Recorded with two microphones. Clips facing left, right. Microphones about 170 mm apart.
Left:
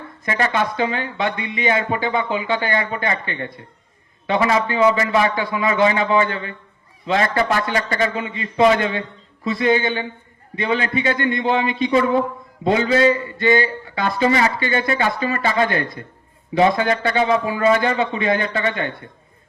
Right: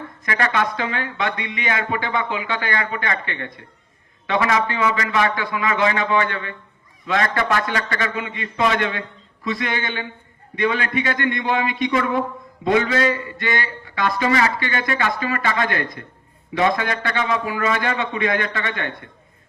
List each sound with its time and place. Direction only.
0.3 s a man's voice: 25° left (ahead or behind)